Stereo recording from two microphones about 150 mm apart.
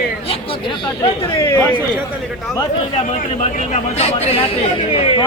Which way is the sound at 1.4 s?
20° left (ahead or behind).